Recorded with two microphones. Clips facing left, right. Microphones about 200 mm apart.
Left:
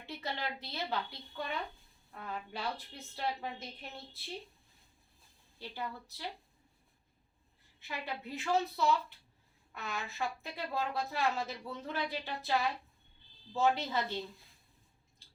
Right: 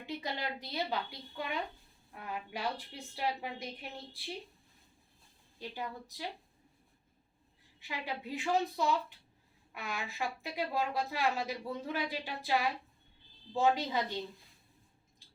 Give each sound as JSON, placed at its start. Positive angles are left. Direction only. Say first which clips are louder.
{"t": 0.0, "sound": "a woman's voice", "louder": "right 2 dB", "side_deg": -15}
{"t": 2.2, "sound": "a woman's voice", "louder": "right 2 dB", "side_deg": -15}
{"t": 5.5, "sound": "a woman's voice", "louder": "right 1 dB", "side_deg": -15}
{"t": 7.8, "sound": "a woman's voice", "louder": "right 1 dB", "side_deg": -15}